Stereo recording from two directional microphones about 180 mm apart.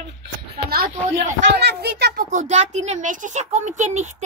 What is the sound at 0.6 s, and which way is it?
Speech, 55° right (ahead or behind).